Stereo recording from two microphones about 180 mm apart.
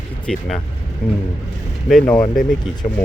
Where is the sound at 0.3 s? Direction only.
Centre (ahead or behind).